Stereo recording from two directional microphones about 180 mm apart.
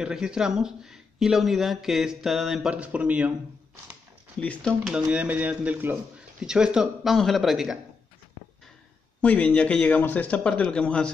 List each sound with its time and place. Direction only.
0.0 s speech: 5° right (ahead or behind)
4.4 s speech: 5° left (ahead or behind)
9.2 s a man's voice: 5° left (ahead or behind)